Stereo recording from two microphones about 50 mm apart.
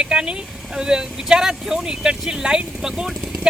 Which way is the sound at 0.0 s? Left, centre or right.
Centre.